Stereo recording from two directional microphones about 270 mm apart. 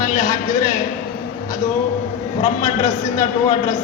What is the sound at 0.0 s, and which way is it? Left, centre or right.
Speech, centre.